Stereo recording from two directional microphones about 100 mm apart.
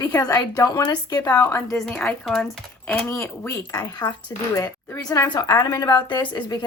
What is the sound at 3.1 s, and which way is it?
Speech, 30° left (ahead or behind).